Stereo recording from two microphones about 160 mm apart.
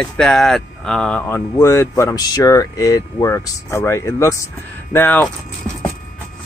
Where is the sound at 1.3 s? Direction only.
15° left (ahead or behind).